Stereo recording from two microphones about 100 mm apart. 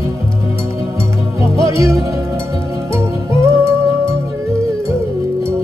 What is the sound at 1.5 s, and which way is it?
Music, 30° right (ahead or behind).